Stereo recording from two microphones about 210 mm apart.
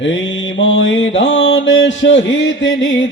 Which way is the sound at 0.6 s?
65° left (ahead or behind).